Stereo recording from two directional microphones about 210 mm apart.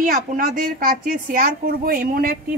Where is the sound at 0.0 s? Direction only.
40° right (ahead or behind).